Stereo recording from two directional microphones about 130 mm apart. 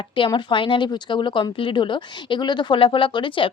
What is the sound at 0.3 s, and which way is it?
Speech, 40° left (ahead or behind).